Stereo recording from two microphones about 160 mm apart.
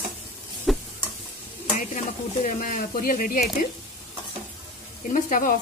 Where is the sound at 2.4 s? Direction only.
55° left (ahead or behind).